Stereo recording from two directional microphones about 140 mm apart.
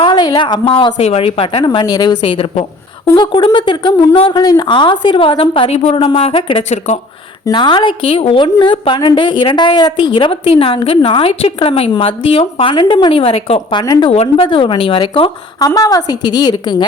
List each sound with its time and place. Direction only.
0.0 s speech: 35° left (ahead or behind)
0.9 s a woman's voice: 45° left (ahead or behind)
6.7 s speech: 55° left (ahead or behind)
7.4 s a woman's voice: 35° left (ahead or behind)
14.1 s a woman's voice: 45° left (ahead or behind)
15.5 s a woman's voice: 25° left (ahead or behind)